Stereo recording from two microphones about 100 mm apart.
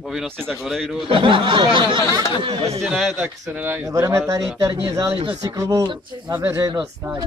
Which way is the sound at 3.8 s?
30° right (ahead or behind).